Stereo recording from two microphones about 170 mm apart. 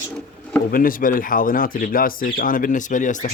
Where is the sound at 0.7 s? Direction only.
55° left (ahead or behind).